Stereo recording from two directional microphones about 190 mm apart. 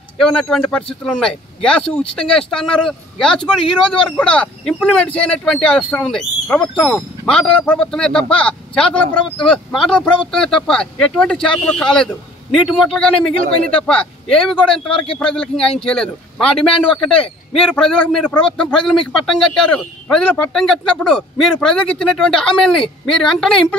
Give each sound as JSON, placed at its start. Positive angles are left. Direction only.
{"t": 0.2, "sound": "speech", "side_deg": 0}
{"t": 16.7, "sound": "a man's voice", "side_deg": 25}
{"t": 17.6, "sound": "speech", "side_deg": 0}